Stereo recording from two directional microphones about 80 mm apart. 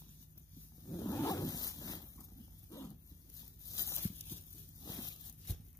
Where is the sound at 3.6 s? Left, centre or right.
Left.